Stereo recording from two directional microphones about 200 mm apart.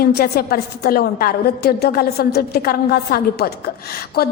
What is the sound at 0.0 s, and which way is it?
A woman's voice, 50° left (ahead or behind).